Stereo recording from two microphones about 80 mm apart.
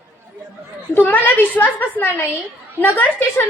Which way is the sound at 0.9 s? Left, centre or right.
Left.